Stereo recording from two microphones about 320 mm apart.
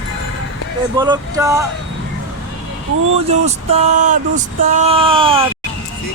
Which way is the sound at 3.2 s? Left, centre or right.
Centre.